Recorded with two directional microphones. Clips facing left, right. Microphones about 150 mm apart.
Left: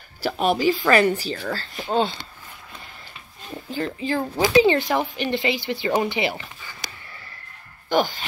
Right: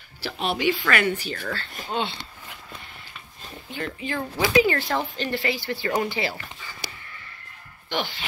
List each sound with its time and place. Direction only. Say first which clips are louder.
0.2 s speech: left 5 dB; 45° left (ahead or behind)
3.7 s speech: left 5 dB; 35° left (ahead or behind)
7.9 s dog: left 8 dB; 45° left (ahead or behind)